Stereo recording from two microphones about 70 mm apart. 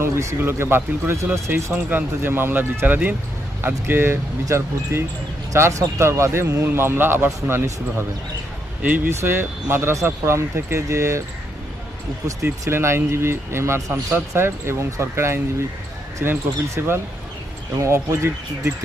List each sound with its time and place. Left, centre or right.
0.0 s speech: right
1.9 s speech: right
12.6 s speech: right